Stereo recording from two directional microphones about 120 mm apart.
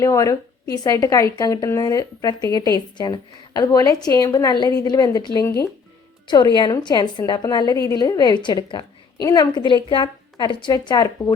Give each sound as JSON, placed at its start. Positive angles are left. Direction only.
{"t": 0.0, "sound": "a woman's voice", "side_deg": 25}